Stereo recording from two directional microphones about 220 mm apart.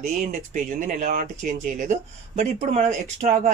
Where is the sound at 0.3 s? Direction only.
35° right (ahead or behind).